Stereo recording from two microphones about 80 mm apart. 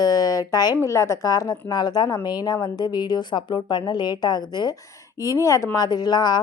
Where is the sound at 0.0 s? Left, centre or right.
Left.